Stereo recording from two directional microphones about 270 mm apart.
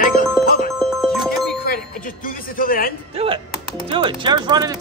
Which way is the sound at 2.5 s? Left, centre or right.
Left.